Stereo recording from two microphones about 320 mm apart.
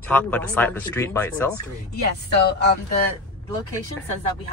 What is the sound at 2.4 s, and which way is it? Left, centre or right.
Speech, left.